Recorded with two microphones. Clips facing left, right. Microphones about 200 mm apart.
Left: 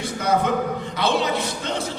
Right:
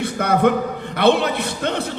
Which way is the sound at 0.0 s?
60° right (ahead or behind).